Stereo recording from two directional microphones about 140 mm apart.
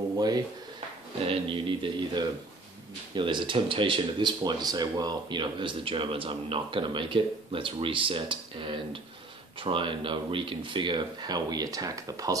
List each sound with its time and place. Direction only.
1.2 s speech: 40° right (ahead or behind); by 12.4 s 25° right (ahead or behind)